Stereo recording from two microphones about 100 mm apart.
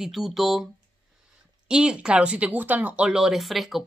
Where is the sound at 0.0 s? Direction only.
5° right (ahead or behind).